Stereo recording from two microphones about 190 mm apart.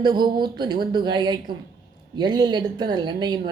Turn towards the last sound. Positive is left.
turn(degrees=-25)  # may be behind; listen again after turning